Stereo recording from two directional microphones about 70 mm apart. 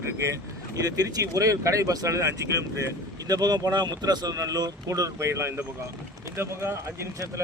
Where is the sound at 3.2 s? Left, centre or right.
Right.